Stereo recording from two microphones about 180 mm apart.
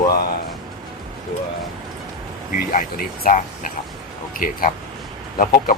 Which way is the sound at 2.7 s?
50° left (ahead or behind).